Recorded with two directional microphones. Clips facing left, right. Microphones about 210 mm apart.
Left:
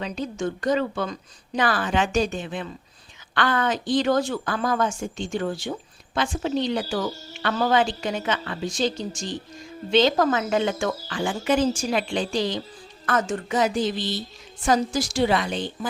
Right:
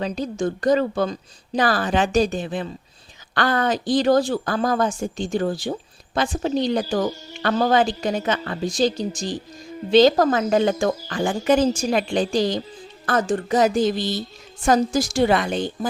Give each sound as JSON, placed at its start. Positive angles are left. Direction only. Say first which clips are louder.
{"t": 0.0, "sound": "speech", "louder": "right 4 dB", "side_deg": -35}